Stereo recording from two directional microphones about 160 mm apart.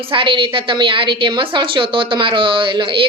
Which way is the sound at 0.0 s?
35° right (ahead or behind).